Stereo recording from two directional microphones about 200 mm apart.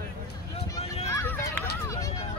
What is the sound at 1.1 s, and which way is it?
Run, 10° left (ahead or behind).